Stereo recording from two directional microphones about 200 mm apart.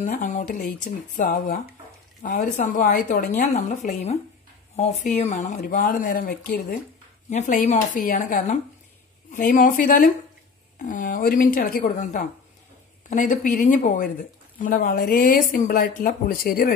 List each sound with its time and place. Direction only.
0.2 s speech: 40° left (ahead or behind)
3.5 s speech: 35° left (ahead or behind)